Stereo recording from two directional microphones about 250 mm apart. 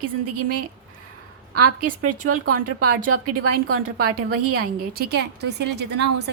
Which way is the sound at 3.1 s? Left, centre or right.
Right.